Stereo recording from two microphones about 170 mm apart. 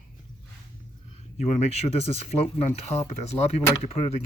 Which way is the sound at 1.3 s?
40° left (ahead or behind).